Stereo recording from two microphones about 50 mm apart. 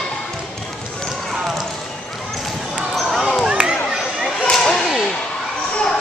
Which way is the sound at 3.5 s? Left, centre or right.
Centre.